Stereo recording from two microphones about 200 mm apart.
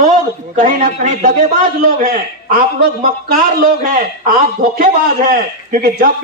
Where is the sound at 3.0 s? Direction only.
45° right (ahead or behind).